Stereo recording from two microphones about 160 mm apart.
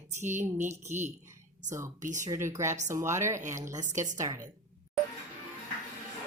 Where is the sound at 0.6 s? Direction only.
45° right (ahead or behind).